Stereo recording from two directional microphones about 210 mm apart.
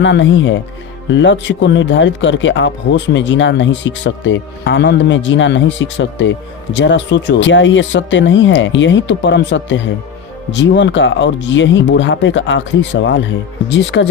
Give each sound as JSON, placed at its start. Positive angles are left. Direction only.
{"t": 0.0, "sound": "speech", "side_deg": 60}